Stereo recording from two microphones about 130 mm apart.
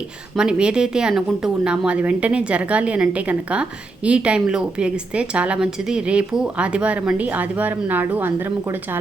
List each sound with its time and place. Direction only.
0.3 s a woman's voice: 5° right (ahead or behind)